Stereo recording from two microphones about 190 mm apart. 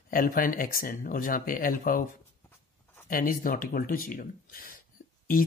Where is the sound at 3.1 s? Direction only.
45° left (ahead or behind).